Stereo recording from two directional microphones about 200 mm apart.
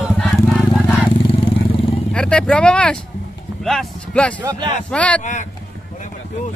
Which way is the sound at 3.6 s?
5° left (ahead or behind).